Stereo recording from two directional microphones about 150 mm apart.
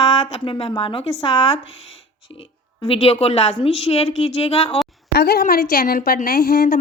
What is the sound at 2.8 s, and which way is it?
A woman's voice, 40° left (ahead or behind).